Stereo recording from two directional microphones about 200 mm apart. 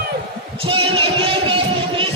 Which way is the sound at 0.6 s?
25° right (ahead or behind).